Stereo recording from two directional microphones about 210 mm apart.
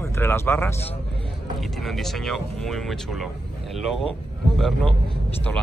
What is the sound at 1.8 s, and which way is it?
Speech, centre (ahead or behind).